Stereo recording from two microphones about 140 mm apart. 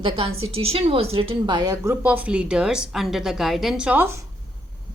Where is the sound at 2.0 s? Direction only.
10° right (ahead or behind).